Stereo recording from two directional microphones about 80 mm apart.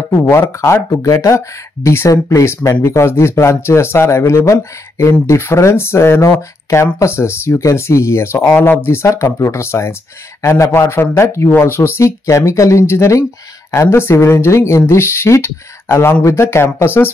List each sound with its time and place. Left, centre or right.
0.1 s speech: left